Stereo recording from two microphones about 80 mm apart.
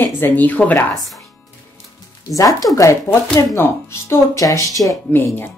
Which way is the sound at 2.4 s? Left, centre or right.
Left.